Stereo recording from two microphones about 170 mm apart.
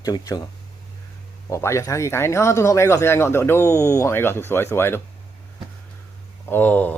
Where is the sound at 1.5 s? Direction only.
15° left (ahead or behind).